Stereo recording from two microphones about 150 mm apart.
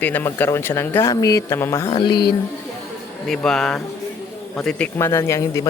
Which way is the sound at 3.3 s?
5° left (ahead or behind).